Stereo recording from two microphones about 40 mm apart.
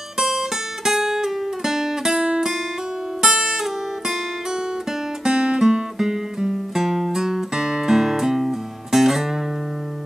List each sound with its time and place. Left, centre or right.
0.3 s music: centre
5.2 s music: right